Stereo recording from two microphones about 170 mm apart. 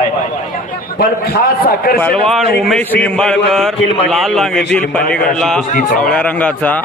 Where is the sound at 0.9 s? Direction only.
65° left (ahead or behind).